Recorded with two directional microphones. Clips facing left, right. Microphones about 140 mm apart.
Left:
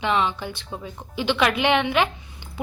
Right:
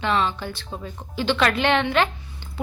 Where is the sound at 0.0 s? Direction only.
15° left (ahead or behind).